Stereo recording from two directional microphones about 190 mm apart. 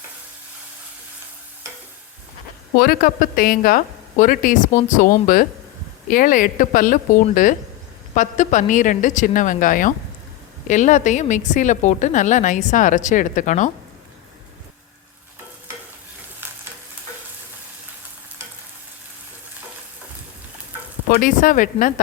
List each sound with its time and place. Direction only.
2.7 s a woman's voice: 50° left (ahead or behind)
21.1 s a woman's voice: 45° left (ahead or behind)